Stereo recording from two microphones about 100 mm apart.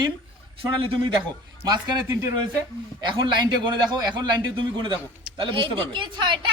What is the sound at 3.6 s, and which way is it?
A man's voice, 45° right (ahead or behind).